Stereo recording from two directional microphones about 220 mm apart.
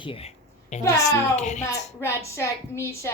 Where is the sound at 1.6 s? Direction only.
10° left (ahead or behind).